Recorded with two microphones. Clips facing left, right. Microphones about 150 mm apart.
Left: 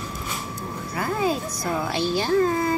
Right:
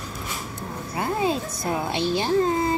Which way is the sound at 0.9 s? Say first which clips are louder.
Even; 25° right (ahead or behind).